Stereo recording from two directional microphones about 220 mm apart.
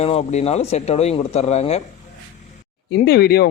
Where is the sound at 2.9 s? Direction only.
45° left (ahead or behind).